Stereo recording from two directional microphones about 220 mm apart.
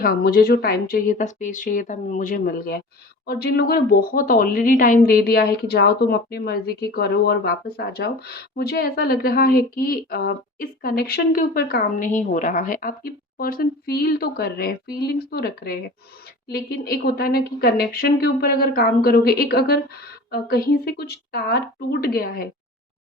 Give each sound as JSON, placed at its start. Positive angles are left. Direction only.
{"t": 0.0, "sound": "a woman's voice", "side_deg": 40}